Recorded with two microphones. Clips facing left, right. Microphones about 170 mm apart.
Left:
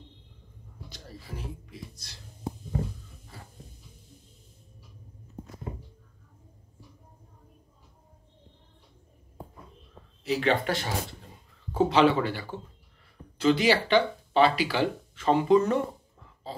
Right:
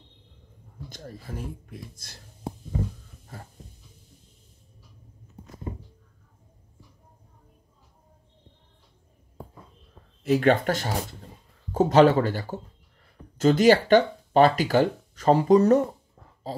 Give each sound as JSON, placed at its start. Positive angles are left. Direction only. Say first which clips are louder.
{"t": 0.8, "sound": "speech", "louder": "right 5 dB", "side_deg": -50}
{"t": 3.3, "sound": "a sound", "louder": "right 5 dB", "side_deg": -50}
{"t": 10.2, "sound": "speech", "louder": "right 5 dB", "side_deg": -50}